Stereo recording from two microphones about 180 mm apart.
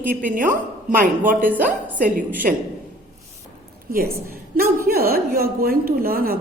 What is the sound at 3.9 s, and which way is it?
A woman's voice, 60° right (ahead or behind).